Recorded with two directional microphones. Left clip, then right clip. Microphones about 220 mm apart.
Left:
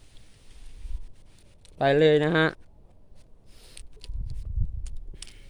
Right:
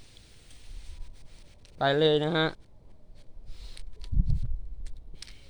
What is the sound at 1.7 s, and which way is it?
Speech, 30° left (ahead or behind).